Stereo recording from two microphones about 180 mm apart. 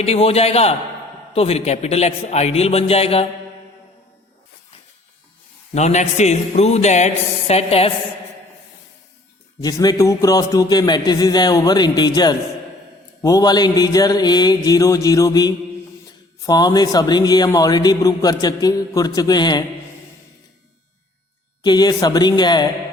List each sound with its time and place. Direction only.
0.0 s a man's voice: 35° left (ahead or behind)
5.7 s a man's voice: 40° left (ahead or behind)
9.6 s a man's voice: 20° left (ahead or behind)
21.6 s a man's voice: 20° left (ahead or behind)